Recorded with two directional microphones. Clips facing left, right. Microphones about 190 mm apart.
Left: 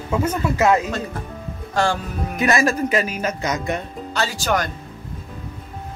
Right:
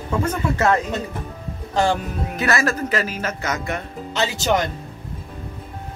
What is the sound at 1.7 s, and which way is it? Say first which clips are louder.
Speech: right 1 dB; 20° right (ahead or behind).